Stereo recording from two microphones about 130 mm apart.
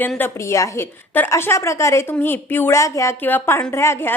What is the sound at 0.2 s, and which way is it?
A woman's voice, 20° left (ahead or behind).